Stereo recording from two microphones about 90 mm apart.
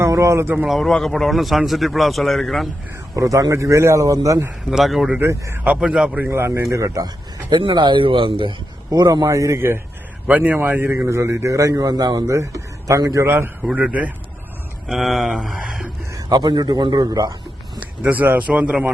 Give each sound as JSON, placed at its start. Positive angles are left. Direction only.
{"t": 0.0, "sound": "speech", "side_deg": -35}
{"t": 0.6, "sound": "a man's voice", "side_deg": 0}
{"t": 3.2, "sound": "a man's voice", "side_deg": -40}
{"t": 4.7, "sound": "a man's voice", "side_deg": -5}
{"t": 5.1, "sound": "speech", "side_deg": -30}
{"t": 5.6, "sound": "a man's voice", "side_deg": -10}
{"t": 6.2, "sound": "a man's voice", "side_deg": -30}
{"t": 7.5, "sound": "speech", "side_deg": -60}
{"t": 8.9, "sound": "a man's voice", "side_deg": -40}
{"t": 10.2, "sound": "a man's voice", "side_deg": -15}
{"t": 13.2, "sound": "a man's voice", "side_deg": -25}
{"t": 14.8, "sound": "speech", "side_deg": 0}
{"t": 16.1, "sound": "a man's voice", "side_deg": -50}
{"t": 18.0, "sound": "a man's voice", "side_deg": -20}